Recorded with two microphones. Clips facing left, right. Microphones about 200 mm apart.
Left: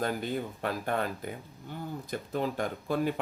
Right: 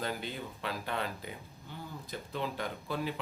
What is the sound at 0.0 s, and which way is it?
Speech, 50° left (ahead or behind).